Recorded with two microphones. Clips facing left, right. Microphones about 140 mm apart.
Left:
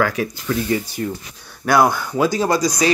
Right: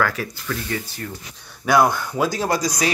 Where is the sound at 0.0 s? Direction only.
15° left (ahead or behind).